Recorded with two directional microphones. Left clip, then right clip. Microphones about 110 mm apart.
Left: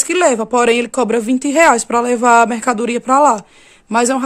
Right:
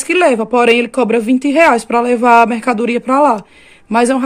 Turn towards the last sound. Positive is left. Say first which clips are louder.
# right 2 dB
turn(degrees=25)  # may be behind; listen again after turning